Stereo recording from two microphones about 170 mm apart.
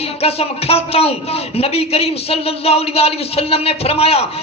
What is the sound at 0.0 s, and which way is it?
A man's voice, 35° left (ahead or behind).